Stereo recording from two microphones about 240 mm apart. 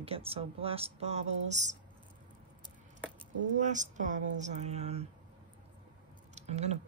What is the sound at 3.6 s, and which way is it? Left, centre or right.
Speech, right.